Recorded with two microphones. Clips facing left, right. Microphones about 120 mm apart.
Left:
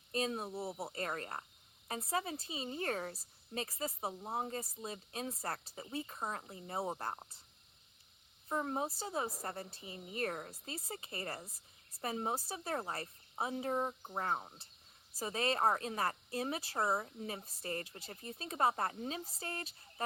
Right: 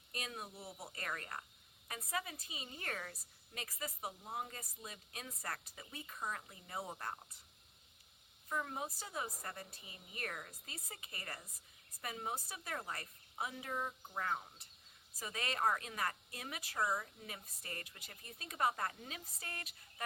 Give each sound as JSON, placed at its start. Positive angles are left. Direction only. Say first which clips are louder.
{"t": 0.1, "sound": "a woman's voice", "louder": "left 10 dB", "side_deg": 30}
{"t": 8.4, "sound": "a woman's voice", "louder": "left 5 dB", "side_deg": 35}